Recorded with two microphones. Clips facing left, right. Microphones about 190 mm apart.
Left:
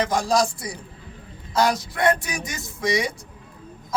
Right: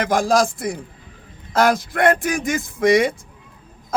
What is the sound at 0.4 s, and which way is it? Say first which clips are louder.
A man's voice: right 5 dB; 50° right (ahead or behind).